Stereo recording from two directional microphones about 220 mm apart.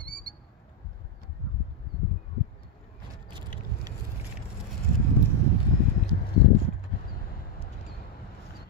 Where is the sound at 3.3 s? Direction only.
20° right (ahead or behind).